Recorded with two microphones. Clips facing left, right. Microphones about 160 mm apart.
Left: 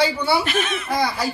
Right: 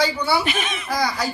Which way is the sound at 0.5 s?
5° right (ahead or behind).